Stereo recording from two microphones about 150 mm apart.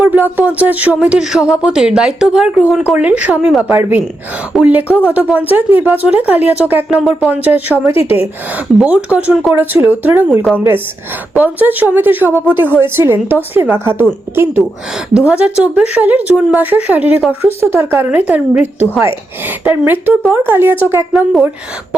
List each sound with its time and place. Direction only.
0.0 s a woman's voice: 10° right (ahead or behind)
15.1 s a woman's voice: 5° right (ahead or behind)